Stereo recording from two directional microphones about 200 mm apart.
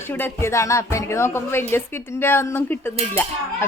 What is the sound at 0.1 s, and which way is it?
Dishes, 10° left (ahead or behind).